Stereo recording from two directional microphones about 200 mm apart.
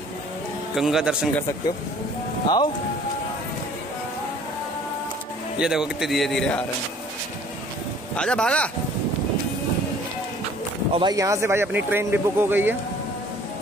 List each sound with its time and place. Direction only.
0.7 s a man's voice: centre (ahead or behind)
2.4 s speech: 20° left (ahead or behind)
5.6 s a man's voice: 5° right (ahead or behind)
8.2 s a man's voice: 5° left (ahead or behind)
11.0 s speech: 20° right (ahead or behind)